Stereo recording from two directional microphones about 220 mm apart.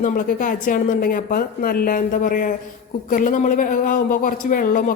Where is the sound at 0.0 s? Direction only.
40° left (ahead or behind).